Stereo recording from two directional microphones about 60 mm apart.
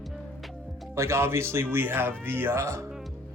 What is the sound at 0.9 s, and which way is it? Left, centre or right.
Speech, right.